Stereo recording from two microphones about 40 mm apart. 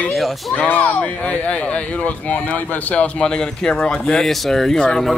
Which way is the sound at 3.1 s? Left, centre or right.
Left.